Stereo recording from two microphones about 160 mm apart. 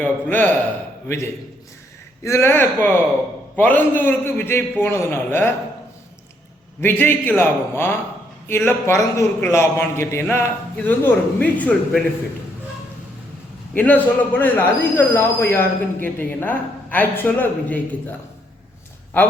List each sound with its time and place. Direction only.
0.0 s speech: 10° left (ahead or behind)
6.8 s speech: 15° left (ahead or behind)
13.7 s speech: 10° left (ahead or behind)